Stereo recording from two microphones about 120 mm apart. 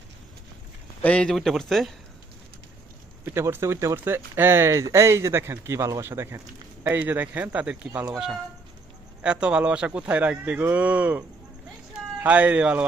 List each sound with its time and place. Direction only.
1.0 s a man's voice: 10° left (ahead or behind)
3.2 s speech: 20° right (ahead or behind)
9.2 s speech: 10° right (ahead or behind)